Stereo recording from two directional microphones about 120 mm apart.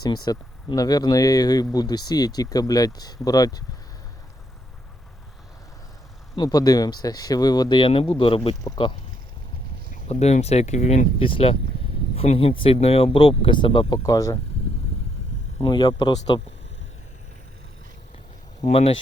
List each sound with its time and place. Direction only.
0.0 s speech: 35° left (ahead or behind)
6.3 s speech: 35° left (ahead or behind)
9.9 s speech: 65° left (ahead or behind)
11.2 s speech: 50° left (ahead or behind)
14.0 s speech: 30° left (ahead or behind)
15.6 s speech: 40° left (ahead or behind)
18.6 s speech: 60° left (ahead or behind)